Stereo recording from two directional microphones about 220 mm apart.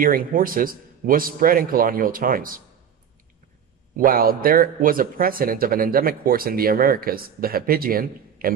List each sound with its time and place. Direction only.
0.0 s a man's voice: 40° right (ahead or behind)
3.9 s a man's voice: 40° right (ahead or behind)